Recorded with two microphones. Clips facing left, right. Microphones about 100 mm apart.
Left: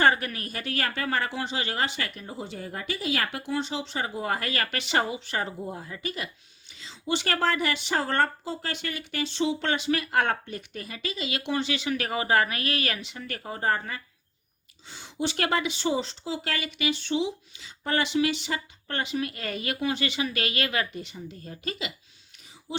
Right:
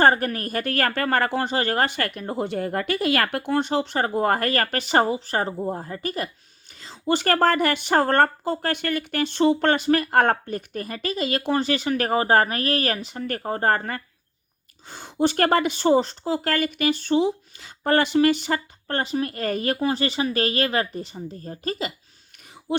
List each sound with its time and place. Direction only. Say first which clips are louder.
0.0 s speech: right 5 dB; 45° right (ahead or behind)